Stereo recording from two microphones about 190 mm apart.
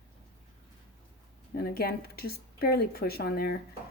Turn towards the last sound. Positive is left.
turn(degrees=55)  # may be behind; listen again after turning